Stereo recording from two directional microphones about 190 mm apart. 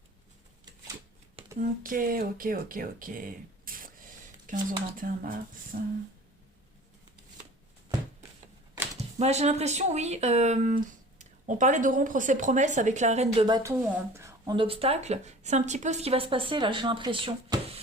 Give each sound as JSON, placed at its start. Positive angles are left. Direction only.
{"t": 1.5, "sound": "speech", "side_deg": -45}
{"t": 9.0, "sound": "speech", "side_deg": -35}
{"t": 13.6, "sound": "speech", "side_deg": -15}